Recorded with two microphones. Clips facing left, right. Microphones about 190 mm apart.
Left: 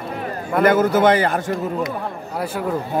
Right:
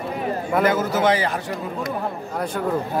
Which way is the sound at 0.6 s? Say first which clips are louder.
Left 6 dB; 55° left (ahead or behind).